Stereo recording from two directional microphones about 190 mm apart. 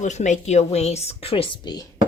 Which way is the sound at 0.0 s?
40° left (ahead or behind).